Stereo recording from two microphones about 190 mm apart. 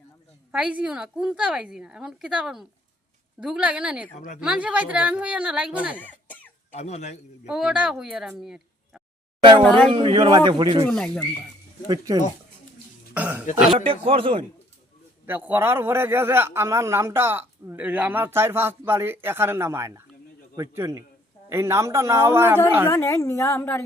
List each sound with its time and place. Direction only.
0.5 s a woman's voice: 5° right (ahead or behind)
4.1 s speech: 40° left (ahead or behind)
4.4 s a man's voice: 5° right (ahead or behind)
6.0 s cough: 10° left (ahead or behind)
6.7 s speech: 35° left (ahead or behind)
7.4 s a woman's voice: 5° right (ahead or behind)
9.9 s a man's voice: 25° right (ahead or behind)
10.8 s a woman's voice: 5° left (ahead or behind)
11.9 s a man's voice: 20° right (ahead or behind)
13.1 s a man's voice: 10° right (ahead or behind)
13.7 s a man's voice: 30° right (ahead or behind)
15.3 s a man's voice: 10° right (ahead or behind)
22.9 s a woman's voice: 15° left (ahead or behind)